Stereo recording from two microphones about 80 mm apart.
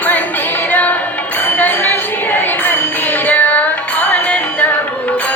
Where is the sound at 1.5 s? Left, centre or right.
Left.